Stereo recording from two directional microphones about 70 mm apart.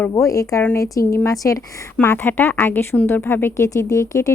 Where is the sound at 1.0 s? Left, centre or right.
Left.